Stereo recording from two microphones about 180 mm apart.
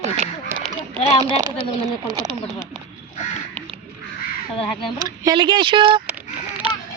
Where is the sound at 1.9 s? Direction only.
20° right (ahead or behind).